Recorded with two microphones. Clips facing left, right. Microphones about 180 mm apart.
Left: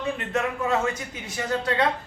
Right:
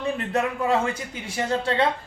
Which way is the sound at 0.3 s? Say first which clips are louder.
Right 2 dB; 30° right (ahead or behind).